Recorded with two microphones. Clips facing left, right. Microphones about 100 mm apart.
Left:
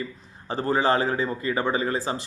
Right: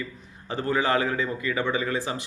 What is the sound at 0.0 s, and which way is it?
A man's voice, 35° left (ahead or behind).